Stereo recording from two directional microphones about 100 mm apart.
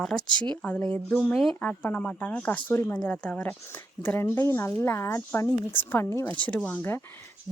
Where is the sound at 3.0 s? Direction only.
10° left (ahead or behind).